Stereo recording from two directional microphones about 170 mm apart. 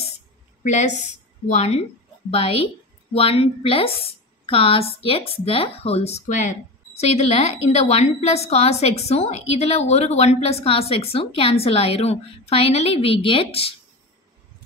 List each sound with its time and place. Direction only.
0.7 s a woman's voice: 45° left (ahead or behind)